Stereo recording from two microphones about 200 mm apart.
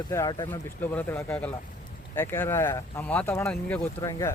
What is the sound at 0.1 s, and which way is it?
Speech, 15° left (ahead or behind).